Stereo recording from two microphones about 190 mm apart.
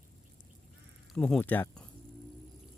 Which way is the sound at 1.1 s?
5° left (ahead or behind).